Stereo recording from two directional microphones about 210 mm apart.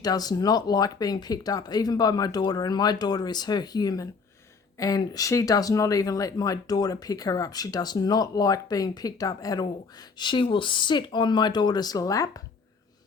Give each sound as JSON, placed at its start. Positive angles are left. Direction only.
{"t": 0.0, "sound": "speech", "side_deg": 20}